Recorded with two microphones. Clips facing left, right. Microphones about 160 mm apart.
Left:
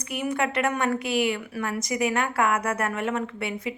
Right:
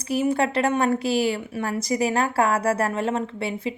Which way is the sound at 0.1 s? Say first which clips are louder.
Right 5 dB; 30° right (ahead or behind).